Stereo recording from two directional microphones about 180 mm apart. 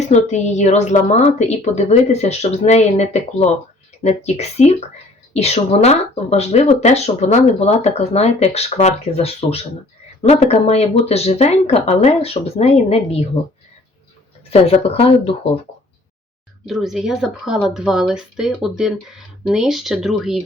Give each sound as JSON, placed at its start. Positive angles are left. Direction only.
{"t": 0.1, "sound": "speech", "side_deg": 40}
{"t": 14.7, "sound": "speech", "side_deg": 35}
{"t": 16.6, "sound": "speech", "side_deg": 0}